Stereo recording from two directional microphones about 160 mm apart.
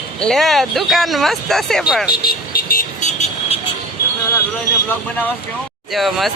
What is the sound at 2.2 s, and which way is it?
Vehicle, 65° left (ahead or behind).